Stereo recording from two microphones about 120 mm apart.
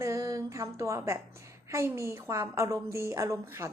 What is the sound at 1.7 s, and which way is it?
A woman's voice, 25° right (ahead or behind).